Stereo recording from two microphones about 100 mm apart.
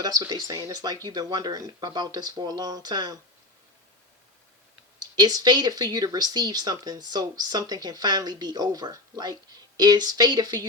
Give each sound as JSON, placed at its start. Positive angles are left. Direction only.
{"t": 0.0, "sound": "speech", "side_deg": -40}
{"t": 5.1, "sound": "speech", "side_deg": -40}